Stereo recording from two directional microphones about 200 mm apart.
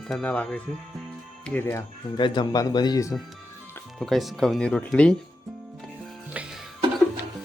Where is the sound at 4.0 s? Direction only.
Centre (ahead or behind).